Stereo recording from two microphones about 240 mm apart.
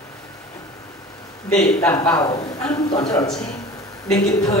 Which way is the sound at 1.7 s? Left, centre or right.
Centre.